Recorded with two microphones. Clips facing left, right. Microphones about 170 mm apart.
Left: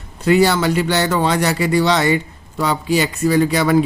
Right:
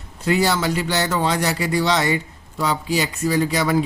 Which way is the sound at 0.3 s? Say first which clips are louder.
Left 5 dB; 65° left (ahead or behind).